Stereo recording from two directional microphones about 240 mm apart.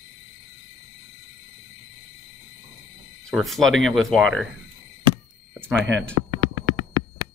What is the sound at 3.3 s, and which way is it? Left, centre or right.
Speech, centre.